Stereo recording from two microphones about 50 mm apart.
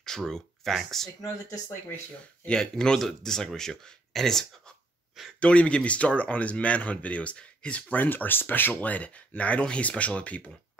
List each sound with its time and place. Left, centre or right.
0.0 s speech: centre
2.4 s speech: centre
5.4 s speech: left
7.9 s speech: left
8.9 s speech: left